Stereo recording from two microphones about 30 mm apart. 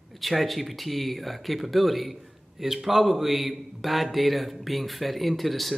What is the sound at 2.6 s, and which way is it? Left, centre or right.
A man's voice, centre.